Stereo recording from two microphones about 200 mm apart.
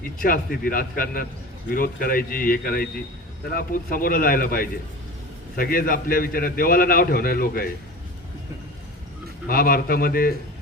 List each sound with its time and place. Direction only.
0.2 s a man's voice: 45° left (ahead or behind)
9.5 s a man's voice: 45° left (ahead or behind)